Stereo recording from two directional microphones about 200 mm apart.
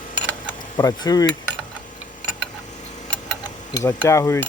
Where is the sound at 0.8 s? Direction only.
20° left (ahead or behind).